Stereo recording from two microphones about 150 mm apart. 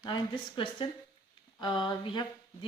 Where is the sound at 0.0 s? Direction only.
30° left (ahead or behind).